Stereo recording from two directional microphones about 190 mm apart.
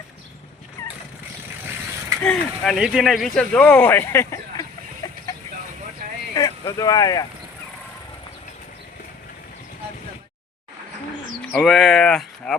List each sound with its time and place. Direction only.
2.2 s speech: 5° left (ahead or behind)
6.3 s speech: 20° left (ahead or behind)
11.5 s speech: centre (ahead or behind)